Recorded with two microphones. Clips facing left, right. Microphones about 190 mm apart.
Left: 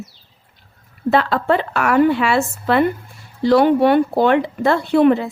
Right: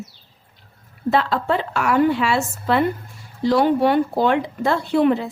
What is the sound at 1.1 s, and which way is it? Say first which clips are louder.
Speech: left 3 dB; 60° left (ahead or behind).